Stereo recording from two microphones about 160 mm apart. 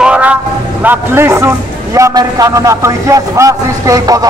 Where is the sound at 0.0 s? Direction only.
5° right (ahead or behind).